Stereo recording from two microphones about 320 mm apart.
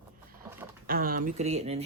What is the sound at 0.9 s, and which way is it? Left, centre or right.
Speech, right.